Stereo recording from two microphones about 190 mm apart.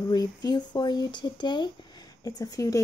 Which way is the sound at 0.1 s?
20° left (ahead or behind).